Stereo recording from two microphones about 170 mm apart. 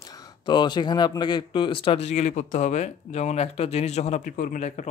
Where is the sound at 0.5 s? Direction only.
25° left (ahead or behind).